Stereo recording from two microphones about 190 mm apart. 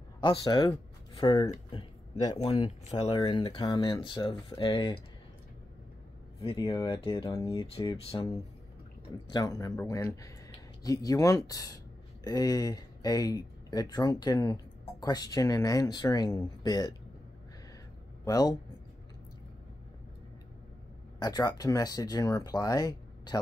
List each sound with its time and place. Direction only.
0.2 s speech: 25° left (ahead or behind)
1.7 s a sound: 20° left (ahead or behind)
2.3 s speech: 30° left (ahead or behind)
6.4 s speech: 25° left (ahead or behind)
9.3 s speech: 20° left (ahead or behind)
18.2 s a man's voice: 20° left (ahead or behind)
21.2 s speech: 20° left (ahead or behind)